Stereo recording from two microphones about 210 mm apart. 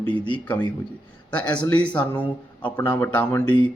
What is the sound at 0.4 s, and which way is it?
Speech, 5° left (ahead or behind).